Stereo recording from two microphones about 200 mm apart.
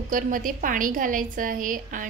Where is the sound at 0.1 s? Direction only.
45° right (ahead or behind).